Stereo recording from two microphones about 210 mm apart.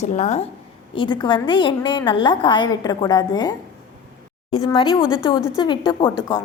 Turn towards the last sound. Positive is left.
turn(degrees=20)  # may be behind; listen again after turning